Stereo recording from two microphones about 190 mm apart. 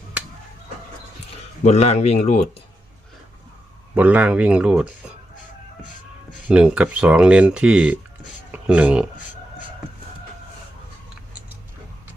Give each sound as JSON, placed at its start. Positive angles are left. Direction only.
{"t": 1.6, "sound": "speech", "side_deg": 35}
{"t": 3.9, "sound": "speech", "side_deg": -5}
{"t": 6.5, "sound": "speech", "side_deg": -5}